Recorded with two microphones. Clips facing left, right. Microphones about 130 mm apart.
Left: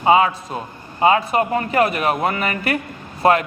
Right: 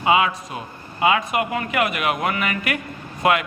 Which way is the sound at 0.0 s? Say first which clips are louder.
Left 4 dB; 35° left (ahead or behind).